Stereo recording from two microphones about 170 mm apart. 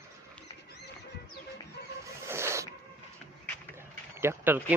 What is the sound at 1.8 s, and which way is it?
Vehicle, 60° left (ahead or behind).